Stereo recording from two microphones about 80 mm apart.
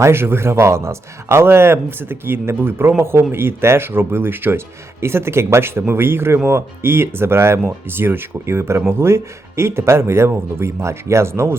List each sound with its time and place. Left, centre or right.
0.0 s a man's voice: right